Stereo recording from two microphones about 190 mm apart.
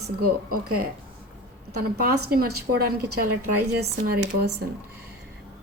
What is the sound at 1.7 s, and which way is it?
A woman's voice, 55° right (ahead or behind).